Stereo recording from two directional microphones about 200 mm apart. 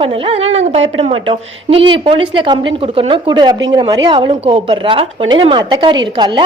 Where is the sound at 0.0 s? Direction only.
30° right (ahead or behind).